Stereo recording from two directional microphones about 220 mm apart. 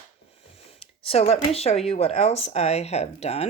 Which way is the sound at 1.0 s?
25° left (ahead or behind).